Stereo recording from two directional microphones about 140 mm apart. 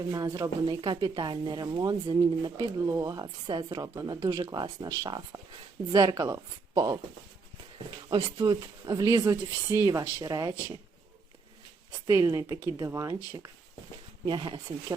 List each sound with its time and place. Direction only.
0.1 s speech: 25° right (ahead or behind)
8.1 s speech: 35° right (ahead or behind)
12.0 s speech: 25° right (ahead or behind)